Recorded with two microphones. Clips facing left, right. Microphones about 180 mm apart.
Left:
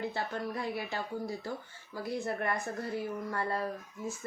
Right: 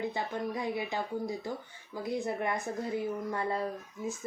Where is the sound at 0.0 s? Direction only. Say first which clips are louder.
Right 2 dB; 15° right (ahead or behind).